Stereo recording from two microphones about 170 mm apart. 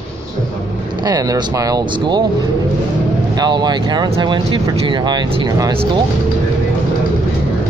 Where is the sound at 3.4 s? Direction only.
25° right (ahead or behind).